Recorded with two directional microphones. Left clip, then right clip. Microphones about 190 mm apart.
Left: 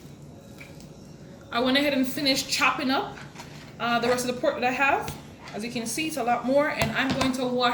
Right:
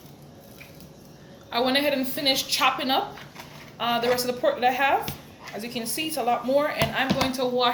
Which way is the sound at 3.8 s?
40° right (ahead or behind).